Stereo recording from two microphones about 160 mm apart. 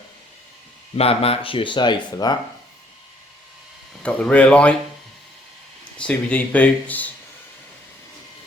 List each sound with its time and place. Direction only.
0.9 s speech: 40° left (ahead or behind)
4.0 s speech: 5° left (ahead or behind)
6.0 s speech: 5° left (ahead or behind)